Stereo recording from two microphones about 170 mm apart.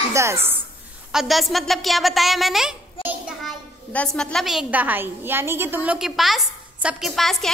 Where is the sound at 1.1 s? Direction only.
Centre (ahead or behind).